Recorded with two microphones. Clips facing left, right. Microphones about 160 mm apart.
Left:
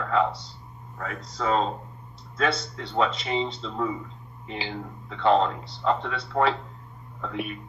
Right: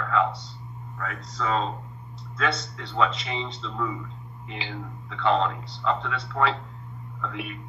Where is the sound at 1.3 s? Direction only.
40° left (ahead or behind).